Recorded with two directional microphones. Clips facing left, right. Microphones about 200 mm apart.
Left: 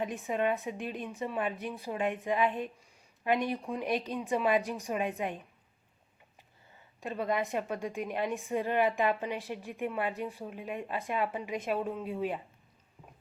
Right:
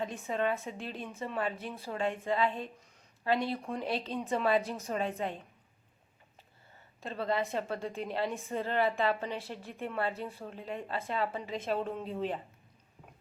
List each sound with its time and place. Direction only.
0.0 s a woman's voice: 15° left (ahead or behind)
7.0 s a woman's voice: 15° left (ahead or behind)